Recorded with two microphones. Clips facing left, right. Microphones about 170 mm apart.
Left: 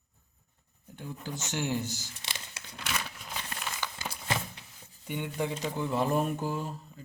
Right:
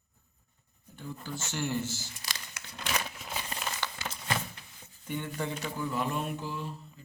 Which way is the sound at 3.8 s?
10° left (ahead or behind).